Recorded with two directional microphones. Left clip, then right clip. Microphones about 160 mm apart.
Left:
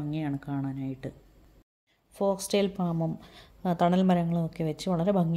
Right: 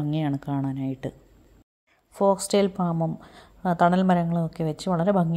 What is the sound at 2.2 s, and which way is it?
A woman's voice, 25° right (ahead or behind).